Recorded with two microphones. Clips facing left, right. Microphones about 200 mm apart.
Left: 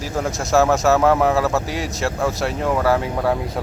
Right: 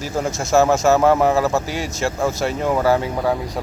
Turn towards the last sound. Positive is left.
turn(degrees=0)  # may be behind; listen again after turning